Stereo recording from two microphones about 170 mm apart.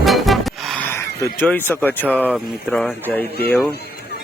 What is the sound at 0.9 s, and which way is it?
Speech, 15° left (ahead or behind).